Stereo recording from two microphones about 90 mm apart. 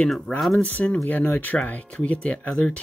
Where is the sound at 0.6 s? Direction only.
15° left (ahead or behind).